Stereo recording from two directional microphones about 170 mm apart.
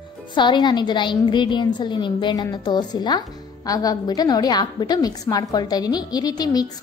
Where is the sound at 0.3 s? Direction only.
25° left (ahead or behind).